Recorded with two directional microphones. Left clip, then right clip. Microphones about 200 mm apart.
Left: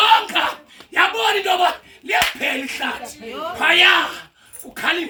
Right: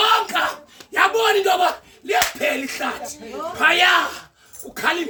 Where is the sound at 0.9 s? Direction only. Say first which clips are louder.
Even; 15° right (ahead or behind).